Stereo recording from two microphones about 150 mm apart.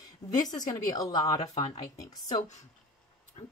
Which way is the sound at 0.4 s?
25° left (ahead or behind).